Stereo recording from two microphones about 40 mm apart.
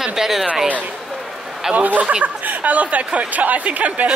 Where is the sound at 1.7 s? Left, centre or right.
Right.